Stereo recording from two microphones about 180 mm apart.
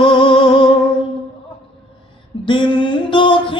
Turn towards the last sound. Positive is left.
turn(degrees=30)  # may be behind; listen again after turning